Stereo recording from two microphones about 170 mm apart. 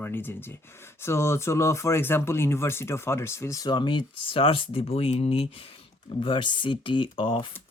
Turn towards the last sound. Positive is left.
turn(degrees=30)  # may be behind; listen again after turning